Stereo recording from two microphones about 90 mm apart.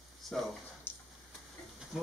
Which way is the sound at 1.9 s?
5° right (ahead or behind).